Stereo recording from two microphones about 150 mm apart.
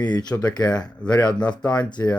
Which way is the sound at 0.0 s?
25° left (ahead or behind).